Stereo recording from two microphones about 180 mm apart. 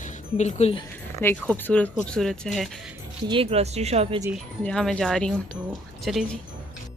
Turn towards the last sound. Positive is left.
turn(degrees=0)  # may be behind; listen again after turning